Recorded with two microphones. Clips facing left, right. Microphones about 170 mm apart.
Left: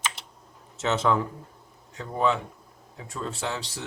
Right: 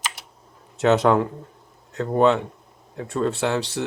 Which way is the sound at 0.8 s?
60° right (ahead or behind).